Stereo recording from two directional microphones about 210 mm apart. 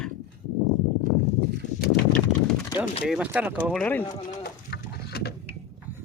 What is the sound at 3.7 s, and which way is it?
Speech, 5° left (ahead or behind).